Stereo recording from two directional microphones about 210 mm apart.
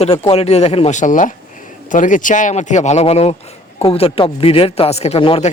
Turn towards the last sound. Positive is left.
turn(degrees=25)  # may be behind; listen again after turning